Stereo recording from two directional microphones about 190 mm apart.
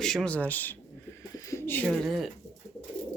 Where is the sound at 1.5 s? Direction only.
10° left (ahead or behind).